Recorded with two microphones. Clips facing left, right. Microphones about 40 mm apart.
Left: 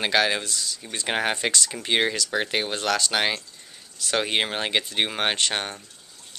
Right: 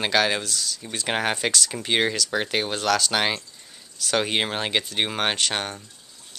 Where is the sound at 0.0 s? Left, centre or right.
Centre.